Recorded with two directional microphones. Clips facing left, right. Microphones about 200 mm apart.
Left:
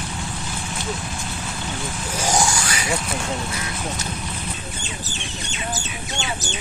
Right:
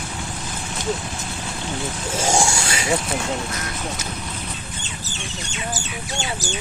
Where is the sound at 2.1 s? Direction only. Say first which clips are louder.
Right 1 dB; 25° right (ahead or behind).